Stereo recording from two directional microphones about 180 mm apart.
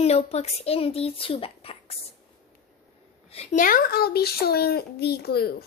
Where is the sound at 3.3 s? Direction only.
35° left (ahead or behind); by 5.5 s 60° left (ahead or behind).